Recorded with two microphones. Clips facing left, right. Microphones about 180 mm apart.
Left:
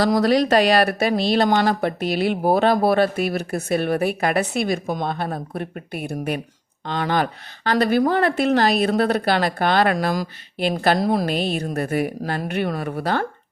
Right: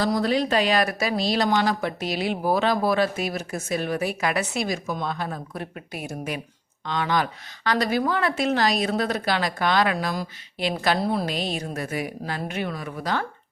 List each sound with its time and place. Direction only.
0.0 s speech: 75° left (ahead or behind); by 6.4 s 55° left (ahead or behind)
6.8 s a woman's voice: 45° left (ahead or behind)
11.2 s speech: 60° left (ahead or behind)